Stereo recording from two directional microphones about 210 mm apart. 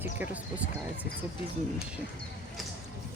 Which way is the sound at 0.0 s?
10° right (ahead or behind).